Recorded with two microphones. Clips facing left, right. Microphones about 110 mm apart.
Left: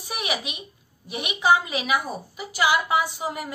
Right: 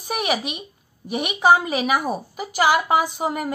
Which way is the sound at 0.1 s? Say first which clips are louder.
Right 6 dB; 45° right (ahead or behind).